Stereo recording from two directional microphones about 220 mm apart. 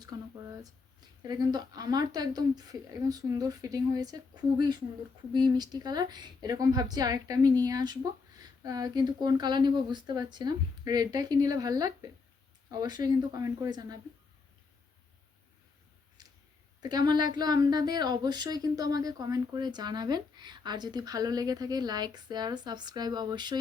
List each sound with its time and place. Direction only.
0.0 s a woman's voice: 15° right (ahead or behind)
16.8 s a woman's voice: 20° right (ahead or behind)